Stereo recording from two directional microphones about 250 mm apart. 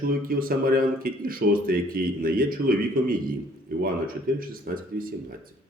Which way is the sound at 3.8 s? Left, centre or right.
Right.